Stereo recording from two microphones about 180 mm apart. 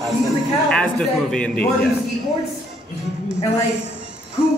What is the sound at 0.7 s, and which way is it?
Speech, 5° left (ahead or behind).